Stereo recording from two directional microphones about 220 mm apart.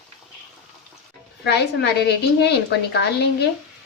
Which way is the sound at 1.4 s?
50° left (ahead or behind).